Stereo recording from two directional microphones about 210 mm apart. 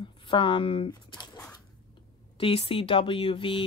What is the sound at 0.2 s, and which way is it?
Speech, 25° left (ahead or behind).